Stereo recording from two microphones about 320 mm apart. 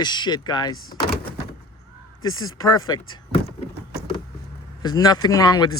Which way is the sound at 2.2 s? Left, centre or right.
Centre.